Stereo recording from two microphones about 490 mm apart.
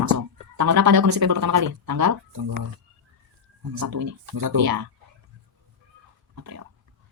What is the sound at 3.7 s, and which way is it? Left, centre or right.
Speech, right.